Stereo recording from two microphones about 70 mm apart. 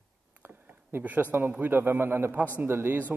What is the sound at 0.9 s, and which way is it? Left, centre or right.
A man's voice, right.